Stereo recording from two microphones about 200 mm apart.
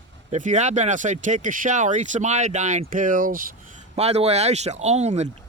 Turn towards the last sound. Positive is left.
turn(degrees=-35)  # may be behind; listen again after turning